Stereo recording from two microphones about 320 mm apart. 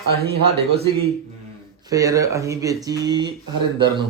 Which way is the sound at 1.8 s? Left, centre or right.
Centre.